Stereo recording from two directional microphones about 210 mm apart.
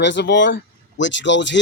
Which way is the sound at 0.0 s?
55° left (ahead or behind).